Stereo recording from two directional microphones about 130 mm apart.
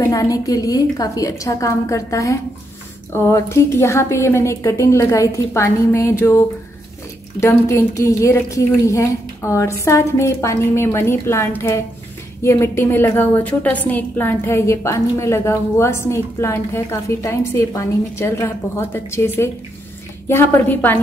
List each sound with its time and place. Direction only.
0.0 s a woman's voice: 25° left (ahead or behind)